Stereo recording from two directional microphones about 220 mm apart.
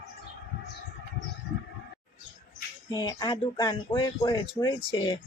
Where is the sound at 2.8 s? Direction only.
20° left (ahead or behind).